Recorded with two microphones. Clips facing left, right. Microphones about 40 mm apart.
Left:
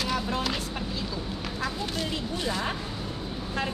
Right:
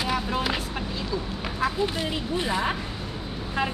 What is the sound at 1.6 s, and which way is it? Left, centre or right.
Speech, centre.